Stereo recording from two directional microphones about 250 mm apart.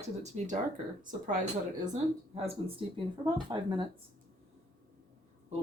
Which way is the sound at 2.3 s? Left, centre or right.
Right.